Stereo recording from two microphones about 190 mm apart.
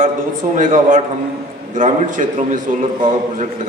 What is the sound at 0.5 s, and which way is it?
A man's voice, 40° right (ahead or behind).